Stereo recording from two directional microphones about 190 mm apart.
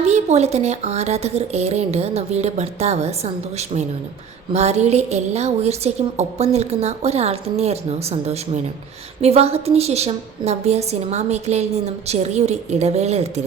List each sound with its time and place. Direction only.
0.0 s a woman's voice: 35° right (ahead or behind)
4.5 s a woman's voice: 35° right (ahead or behind)